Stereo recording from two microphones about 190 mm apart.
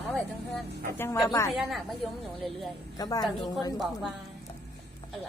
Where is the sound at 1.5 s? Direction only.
Centre (ahead or behind).